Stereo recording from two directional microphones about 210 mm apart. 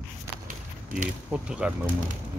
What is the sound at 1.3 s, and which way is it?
Speech, 5° right (ahead or behind).